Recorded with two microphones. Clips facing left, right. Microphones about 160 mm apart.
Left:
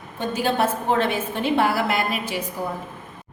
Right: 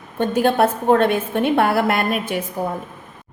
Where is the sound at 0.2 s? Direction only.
55° right (ahead or behind).